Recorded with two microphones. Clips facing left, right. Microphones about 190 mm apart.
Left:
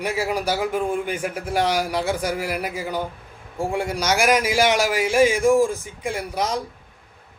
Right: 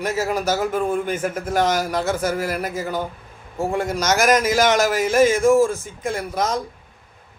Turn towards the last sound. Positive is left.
turn(degrees=10)  # may be behind; listen again after turning